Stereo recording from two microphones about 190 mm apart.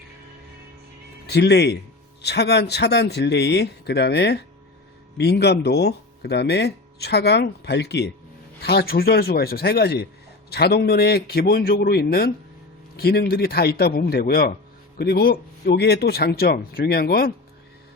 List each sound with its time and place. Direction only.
1.3 s speech: 60° left (ahead or behind)